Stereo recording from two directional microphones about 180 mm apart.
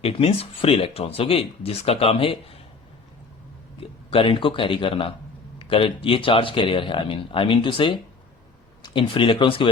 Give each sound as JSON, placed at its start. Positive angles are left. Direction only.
{"t": 0.0, "sound": "speech", "side_deg": 30}
{"t": 3.8, "sound": "speech", "side_deg": 30}